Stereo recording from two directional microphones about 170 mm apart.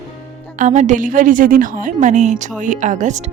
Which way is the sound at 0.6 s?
45° right (ahead or behind).